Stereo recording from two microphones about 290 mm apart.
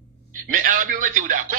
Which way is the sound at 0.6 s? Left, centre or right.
Right.